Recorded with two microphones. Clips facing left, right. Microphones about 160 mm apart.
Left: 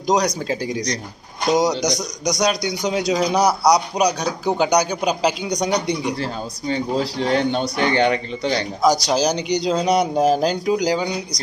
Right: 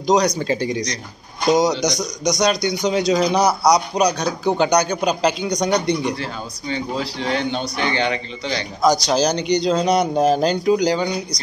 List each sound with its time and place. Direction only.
0.0 s a man's voice: 10° left (ahead or behind)
6.7 s a man's voice: 40° left (ahead or behind)
8.8 s a man's voice: 10° left (ahead or behind)